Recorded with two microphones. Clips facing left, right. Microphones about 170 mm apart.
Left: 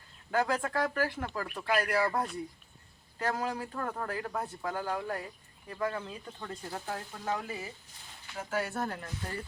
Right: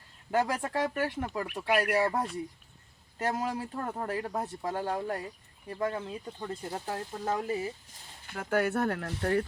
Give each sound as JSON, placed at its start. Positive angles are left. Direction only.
{"t": 0.3, "sound": "speech", "side_deg": -20}
{"t": 3.2, "sound": "speech", "side_deg": -25}
{"t": 8.3, "sound": "speech", "side_deg": -60}